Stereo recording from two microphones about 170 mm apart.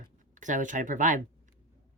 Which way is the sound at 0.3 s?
50° right (ahead or behind).